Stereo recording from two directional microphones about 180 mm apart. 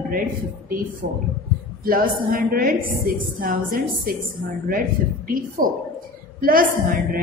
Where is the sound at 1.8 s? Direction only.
55° right (ahead or behind).